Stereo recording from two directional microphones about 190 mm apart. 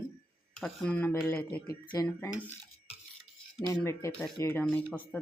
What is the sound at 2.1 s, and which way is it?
Speech, 10° left (ahead or behind).